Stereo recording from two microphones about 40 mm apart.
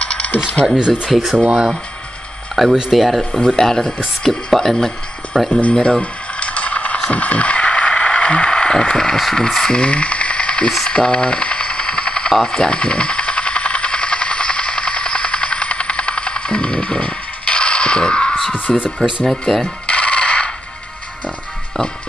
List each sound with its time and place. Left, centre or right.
0.0 s coin: left
0.7 s speech: right
2.5 s speech: centre
3.3 s speech: centre
5.5 s speech: left
5.8 s a sound: left
9.3 s speech: centre
9.8 s a sound: left
12.4 s steam: left
18.7 s speech: centre
19.9 s coin: left